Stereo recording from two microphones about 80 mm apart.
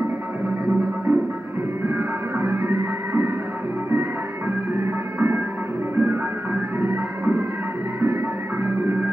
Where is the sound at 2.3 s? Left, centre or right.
Right.